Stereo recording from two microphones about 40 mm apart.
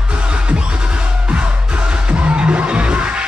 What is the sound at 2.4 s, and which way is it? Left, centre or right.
Music, right.